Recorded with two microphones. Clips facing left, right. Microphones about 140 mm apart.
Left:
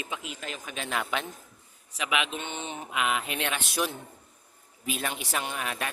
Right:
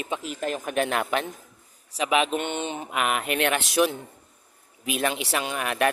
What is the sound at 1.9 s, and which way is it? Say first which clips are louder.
Speech: right 7 dB; 35° right (ahead or behind).